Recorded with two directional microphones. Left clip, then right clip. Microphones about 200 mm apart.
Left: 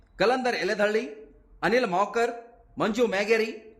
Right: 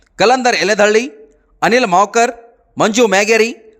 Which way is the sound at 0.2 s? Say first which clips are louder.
Right 13 dB; 45° right (ahead or behind).